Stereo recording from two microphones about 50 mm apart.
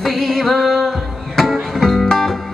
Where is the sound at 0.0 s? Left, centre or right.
Centre.